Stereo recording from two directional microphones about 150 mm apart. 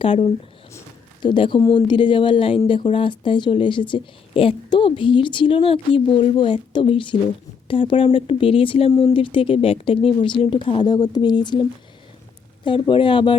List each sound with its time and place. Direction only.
0.0 s a woman's voice: 35° left (ahead or behind)
8.9 s speech: 25° left (ahead or behind)
9.1 s a woman's voice: 35° left (ahead or behind)
12.6 s a woman's voice: 35° left (ahead or behind)